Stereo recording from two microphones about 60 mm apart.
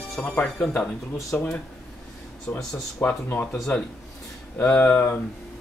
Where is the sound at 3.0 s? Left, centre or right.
Left.